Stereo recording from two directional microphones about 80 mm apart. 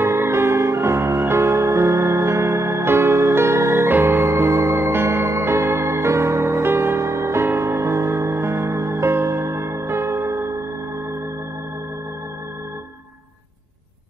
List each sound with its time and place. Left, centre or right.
0.0 s music: right